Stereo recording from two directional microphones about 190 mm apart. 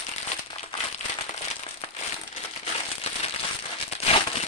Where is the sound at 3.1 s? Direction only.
30° left (ahead or behind).